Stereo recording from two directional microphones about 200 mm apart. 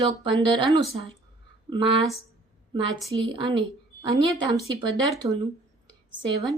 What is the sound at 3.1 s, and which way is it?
Speech, 25° right (ahead or behind).